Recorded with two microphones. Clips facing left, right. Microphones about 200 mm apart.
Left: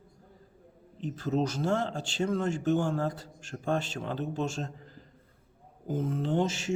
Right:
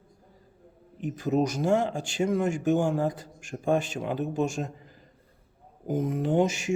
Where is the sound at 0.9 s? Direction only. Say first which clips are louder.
Right 4 dB; 15° right (ahead or behind).